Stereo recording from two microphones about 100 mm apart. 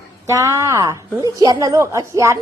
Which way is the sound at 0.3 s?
30° right (ahead or behind).